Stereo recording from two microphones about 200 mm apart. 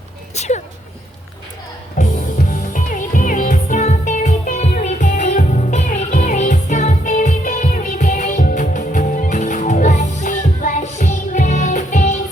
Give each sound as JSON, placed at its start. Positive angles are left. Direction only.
{"t": 0.3, "sound": "speech", "side_deg": 35}
{"t": 2.0, "sound": "music", "side_deg": 40}